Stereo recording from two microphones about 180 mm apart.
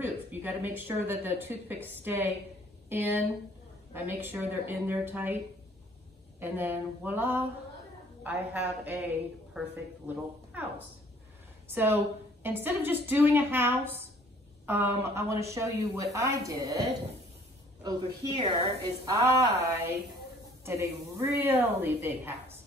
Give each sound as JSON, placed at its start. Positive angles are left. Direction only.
{"t": 0.0, "sound": "speech", "side_deg": -10}
{"t": 6.4, "sound": "a woman's voice", "side_deg": -10}
{"t": 18.3, "sound": "a woman's voice", "side_deg": -30}
{"t": 19.1, "sound": "speech", "side_deg": -15}